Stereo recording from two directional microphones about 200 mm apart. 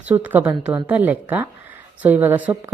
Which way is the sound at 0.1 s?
10° right (ahead or behind).